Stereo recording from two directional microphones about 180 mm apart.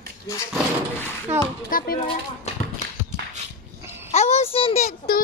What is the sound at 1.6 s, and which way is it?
Speech, 50° left (ahead or behind).